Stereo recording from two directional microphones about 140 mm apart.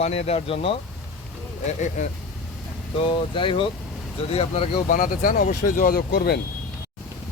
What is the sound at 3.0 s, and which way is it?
Speech, 40° left (ahead or behind).